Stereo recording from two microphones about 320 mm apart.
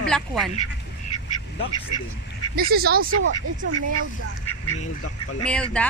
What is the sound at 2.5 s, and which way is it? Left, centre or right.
Speech, right.